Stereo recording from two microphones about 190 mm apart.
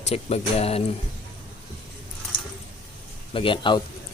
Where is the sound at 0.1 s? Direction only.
30° left (ahead or behind).